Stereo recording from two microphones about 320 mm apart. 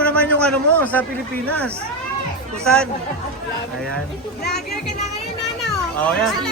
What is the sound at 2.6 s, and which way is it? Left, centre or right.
Speech, centre.